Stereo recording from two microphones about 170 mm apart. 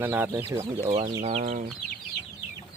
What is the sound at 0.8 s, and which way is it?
Speech, 40° right (ahead or behind).